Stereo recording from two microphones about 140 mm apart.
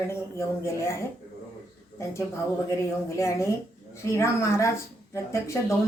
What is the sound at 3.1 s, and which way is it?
Speech, 20° left (ahead or behind).